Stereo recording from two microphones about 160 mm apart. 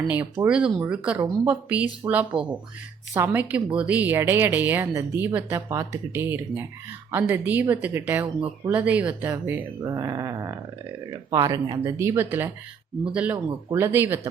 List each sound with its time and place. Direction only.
0.4 s speech: 5° right (ahead or behind)